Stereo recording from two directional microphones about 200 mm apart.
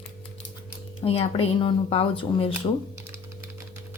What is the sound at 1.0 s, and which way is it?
Speech, 30° left (ahead or behind).